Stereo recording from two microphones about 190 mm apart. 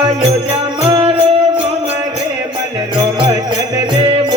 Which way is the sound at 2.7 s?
25° right (ahead or behind).